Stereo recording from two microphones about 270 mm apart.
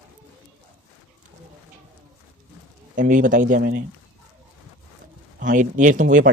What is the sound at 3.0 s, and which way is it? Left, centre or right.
Speech, right.